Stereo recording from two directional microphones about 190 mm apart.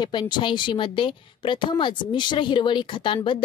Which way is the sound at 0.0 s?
25° left (ahead or behind).